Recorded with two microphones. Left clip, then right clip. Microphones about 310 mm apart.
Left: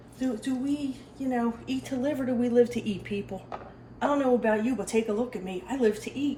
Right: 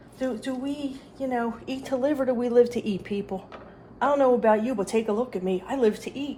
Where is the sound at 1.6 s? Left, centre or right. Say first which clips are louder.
Right 4 dB; centre.